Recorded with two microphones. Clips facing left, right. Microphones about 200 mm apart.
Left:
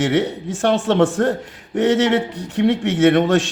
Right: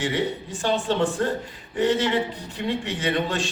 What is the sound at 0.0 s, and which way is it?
A man's voice, 80° left.